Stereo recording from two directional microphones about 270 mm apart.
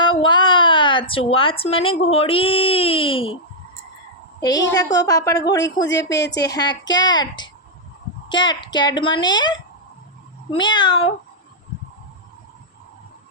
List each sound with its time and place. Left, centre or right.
0.0 s speech: centre
4.4 s a woman's voice: centre
5.9 s a woman's voice: left
6.4 s a child's voice: centre